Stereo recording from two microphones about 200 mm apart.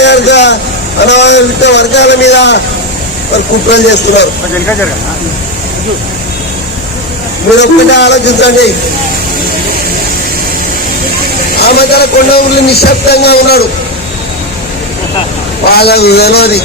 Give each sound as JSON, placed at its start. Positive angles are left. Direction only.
{"t": 0.0, "sound": "vehicle", "side_deg": 60}
{"t": 1.0, "sound": "a man's voice", "side_deg": 60}
{"t": 3.7, "sound": "a man's voice", "side_deg": 60}
{"t": 7.6, "sound": "a man's voice", "side_deg": 60}
{"t": 11.6, "sound": "a man's voice", "side_deg": 50}
{"t": 15.7, "sound": "a man's voice", "side_deg": 55}